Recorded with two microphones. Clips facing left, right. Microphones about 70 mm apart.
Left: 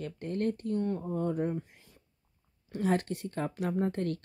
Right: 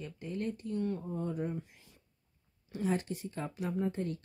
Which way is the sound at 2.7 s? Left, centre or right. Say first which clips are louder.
Left 4 dB; left.